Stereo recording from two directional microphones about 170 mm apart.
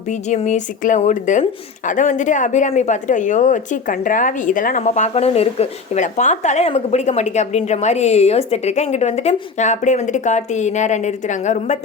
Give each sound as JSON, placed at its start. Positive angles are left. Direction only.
{"t": 0.1, "sound": "a woman's voice", "side_deg": 45}